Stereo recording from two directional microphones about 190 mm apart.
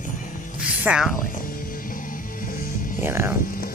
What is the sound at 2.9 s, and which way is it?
Speech, 10° right (ahead or behind).